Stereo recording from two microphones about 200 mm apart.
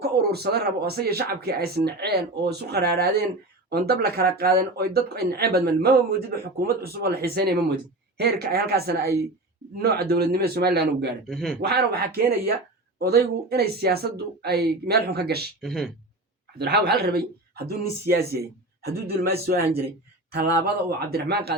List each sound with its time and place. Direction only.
0.0 s speech: 55° right (ahead or behind)
11.3 s a man's voice: centre (ahead or behind)
11.6 s speech: 55° right (ahead or behind)
15.6 s a man's voice: centre (ahead or behind)
16.6 s speech: 55° right (ahead or behind)
21.1 s speech: 50° right (ahead or behind)